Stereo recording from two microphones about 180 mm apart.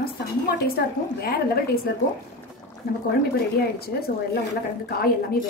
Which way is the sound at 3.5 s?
55° left (ahead or behind).